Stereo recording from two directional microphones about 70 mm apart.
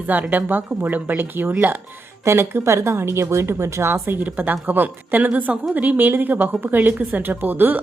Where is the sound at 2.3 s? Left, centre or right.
Right.